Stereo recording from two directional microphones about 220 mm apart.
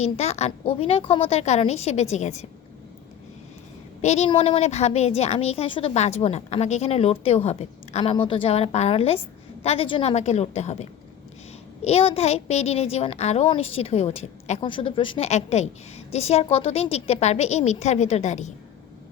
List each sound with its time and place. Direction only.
0.0 s a woman's voice: 30° left (ahead or behind)
4.0 s a woman's voice: 30° left (ahead or behind)
11.9 s a woman's voice: 25° left (ahead or behind)